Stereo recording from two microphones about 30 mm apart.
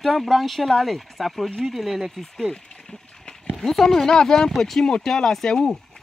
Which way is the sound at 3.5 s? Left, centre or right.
Centre.